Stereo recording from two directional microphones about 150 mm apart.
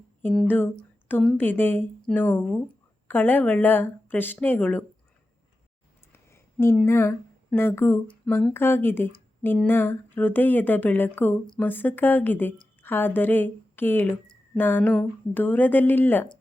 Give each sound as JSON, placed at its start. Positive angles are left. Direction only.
{"t": 0.3, "sound": "a woman's voice", "side_deg": 10}
{"t": 6.3, "sound": "a woman's voice", "side_deg": 15}